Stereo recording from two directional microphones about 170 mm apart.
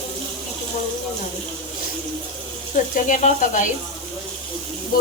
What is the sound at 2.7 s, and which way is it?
Speech, 50° left (ahead or behind).